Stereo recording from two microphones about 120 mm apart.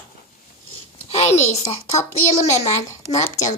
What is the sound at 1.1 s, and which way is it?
A woman's voice, 65° left (ahead or behind).